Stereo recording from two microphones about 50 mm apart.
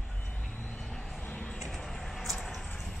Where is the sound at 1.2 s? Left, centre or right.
Left.